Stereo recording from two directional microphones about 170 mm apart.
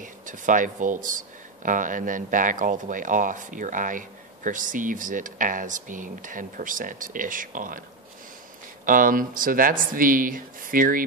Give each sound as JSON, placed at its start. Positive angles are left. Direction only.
{"t": 0.0, "sound": "speech", "side_deg": -50}
{"t": 8.8, "sound": "speech", "side_deg": -55}